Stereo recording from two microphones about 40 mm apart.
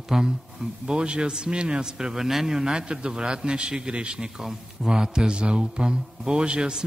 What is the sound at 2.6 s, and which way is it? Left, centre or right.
A man's voice, right.